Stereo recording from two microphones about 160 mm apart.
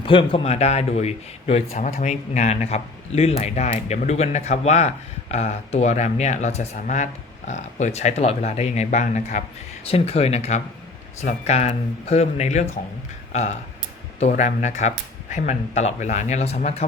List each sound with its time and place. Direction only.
0.0 s speech: 30° left (ahead or behind); by 9.4 s 50° left (ahead or behind)
9.9 s speech: 40° left (ahead or behind)